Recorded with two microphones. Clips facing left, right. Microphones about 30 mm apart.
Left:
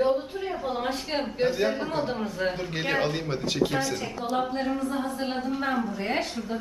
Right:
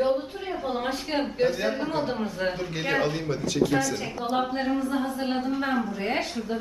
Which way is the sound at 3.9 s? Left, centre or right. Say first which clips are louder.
Right 1 dB; centre.